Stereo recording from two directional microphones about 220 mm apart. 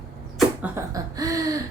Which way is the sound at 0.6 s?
15° right (ahead or behind).